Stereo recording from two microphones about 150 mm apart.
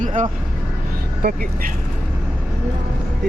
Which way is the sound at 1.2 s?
75° right (ahead or behind).